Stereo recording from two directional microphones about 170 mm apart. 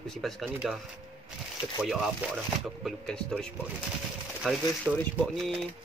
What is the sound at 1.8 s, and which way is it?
Speech, centre (ahead or behind).